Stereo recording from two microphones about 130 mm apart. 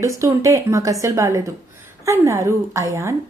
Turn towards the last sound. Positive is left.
turn(degrees=-20)  # may be behind; listen again after turning